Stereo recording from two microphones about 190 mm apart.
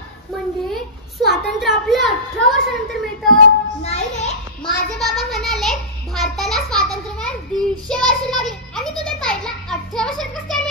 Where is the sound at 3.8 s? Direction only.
35° left (ahead or behind).